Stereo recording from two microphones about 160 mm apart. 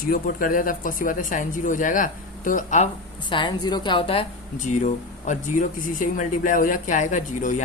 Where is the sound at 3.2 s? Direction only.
30° left (ahead or behind).